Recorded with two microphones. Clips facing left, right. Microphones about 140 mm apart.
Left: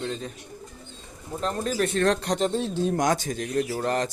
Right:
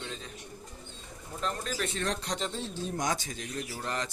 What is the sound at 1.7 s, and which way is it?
Speech, 55° left (ahead or behind).